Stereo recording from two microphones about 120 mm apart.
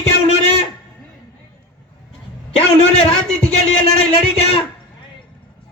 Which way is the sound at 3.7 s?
55° left (ahead or behind).